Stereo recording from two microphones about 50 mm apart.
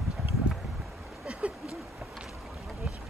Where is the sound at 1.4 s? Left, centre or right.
Right.